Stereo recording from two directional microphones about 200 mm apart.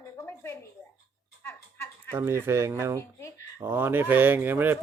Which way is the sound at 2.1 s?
10° right (ahead or behind).